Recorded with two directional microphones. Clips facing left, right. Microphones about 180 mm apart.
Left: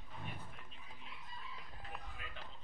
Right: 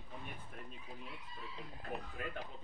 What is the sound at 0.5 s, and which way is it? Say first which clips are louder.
Speech: right 7 dB; 50° right (ahead or behind).